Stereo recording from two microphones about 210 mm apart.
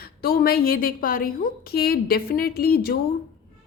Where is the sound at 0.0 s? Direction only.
45° left (ahead or behind).